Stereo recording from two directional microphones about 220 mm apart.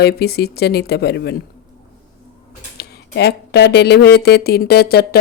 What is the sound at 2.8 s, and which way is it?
Speech, 45° left (ahead or behind).